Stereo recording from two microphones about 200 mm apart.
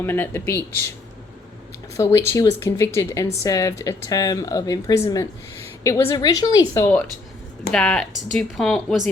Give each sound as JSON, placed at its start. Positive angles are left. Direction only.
{"t": 0.0, "sound": "speech", "side_deg": 10}
{"t": 2.1, "sound": "speech", "side_deg": 15}
{"t": 7.7, "sound": "speech", "side_deg": 5}